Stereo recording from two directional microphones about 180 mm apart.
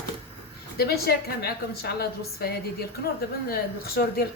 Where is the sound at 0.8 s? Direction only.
60° left (ahead or behind).